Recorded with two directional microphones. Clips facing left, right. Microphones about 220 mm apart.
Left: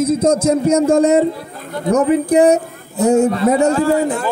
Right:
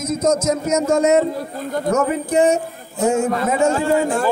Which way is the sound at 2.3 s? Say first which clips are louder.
Left 2 dB; 35° left (ahead or behind).